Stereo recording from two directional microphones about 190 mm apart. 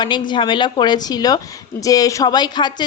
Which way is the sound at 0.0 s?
25° left (ahead or behind).